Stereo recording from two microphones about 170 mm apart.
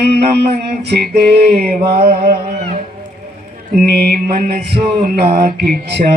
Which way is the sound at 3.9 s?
70° right (ahead or behind).